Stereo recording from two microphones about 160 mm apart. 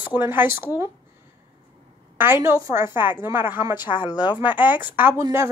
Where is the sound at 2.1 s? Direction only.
15° right (ahead or behind).